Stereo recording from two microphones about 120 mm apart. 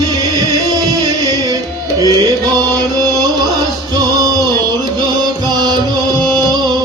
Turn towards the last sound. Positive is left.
turn(degrees=-35)  # may be behind; listen again after turning